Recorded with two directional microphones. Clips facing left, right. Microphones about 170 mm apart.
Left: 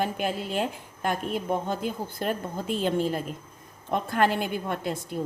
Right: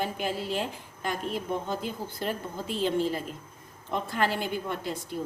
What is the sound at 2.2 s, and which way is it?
A woman's voice, 50° left (ahead or behind).